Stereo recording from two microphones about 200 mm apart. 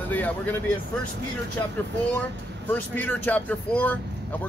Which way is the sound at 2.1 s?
10° left (ahead or behind).